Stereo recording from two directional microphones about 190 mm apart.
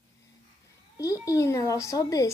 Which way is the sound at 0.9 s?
15° left (ahead or behind).